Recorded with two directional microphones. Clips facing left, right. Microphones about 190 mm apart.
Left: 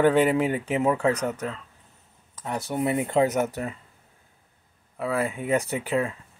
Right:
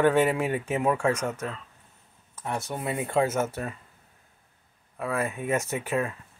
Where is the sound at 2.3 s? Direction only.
10° left (ahead or behind).